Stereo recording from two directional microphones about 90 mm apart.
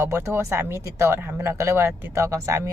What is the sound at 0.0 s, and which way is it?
A woman's voice, 30° right (ahead or behind).